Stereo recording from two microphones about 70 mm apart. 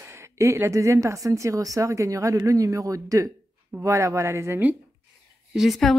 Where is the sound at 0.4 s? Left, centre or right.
Right.